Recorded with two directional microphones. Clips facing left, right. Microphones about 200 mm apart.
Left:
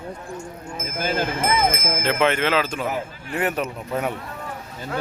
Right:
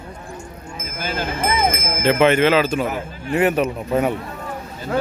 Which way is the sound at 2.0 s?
5° right (ahead or behind).